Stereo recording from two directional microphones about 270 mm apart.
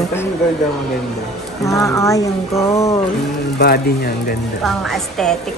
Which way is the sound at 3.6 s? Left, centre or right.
Left.